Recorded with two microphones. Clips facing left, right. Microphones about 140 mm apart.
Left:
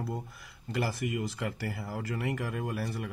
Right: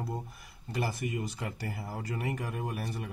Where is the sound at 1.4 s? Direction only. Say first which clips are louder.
Left 3 dB; 20° right (ahead or behind).